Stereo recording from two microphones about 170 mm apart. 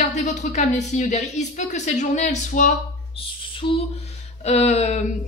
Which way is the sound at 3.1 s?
30° left (ahead or behind).